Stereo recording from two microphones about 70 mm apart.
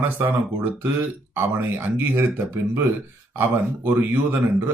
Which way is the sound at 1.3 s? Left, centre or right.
Right.